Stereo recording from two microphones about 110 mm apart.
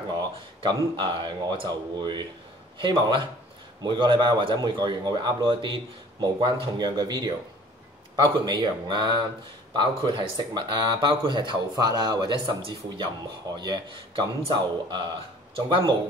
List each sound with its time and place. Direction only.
0.1 s speech: 40° right (ahead or behind)